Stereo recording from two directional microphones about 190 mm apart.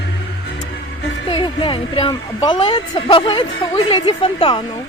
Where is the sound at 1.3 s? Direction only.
25° left (ahead or behind).